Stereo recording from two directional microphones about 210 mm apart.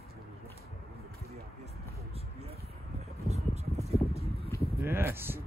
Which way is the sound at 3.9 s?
30° left (ahead or behind).